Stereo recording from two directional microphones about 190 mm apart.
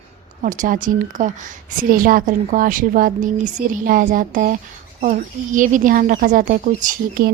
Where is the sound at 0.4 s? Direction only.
45° right (ahead or behind).